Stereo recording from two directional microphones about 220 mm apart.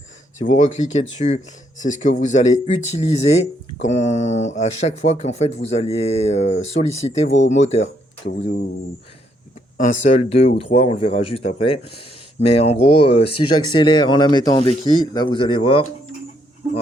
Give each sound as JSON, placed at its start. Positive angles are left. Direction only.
{"t": 0.4, "sound": "speech", "side_deg": 35}
{"t": 9.7, "sound": "speech", "side_deg": 35}